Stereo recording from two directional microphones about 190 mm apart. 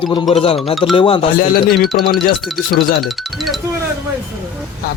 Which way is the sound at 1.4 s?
55° left (ahead or behind).